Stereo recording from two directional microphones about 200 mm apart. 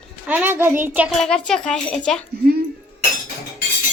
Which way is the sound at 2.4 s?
50° right (ahead or behind).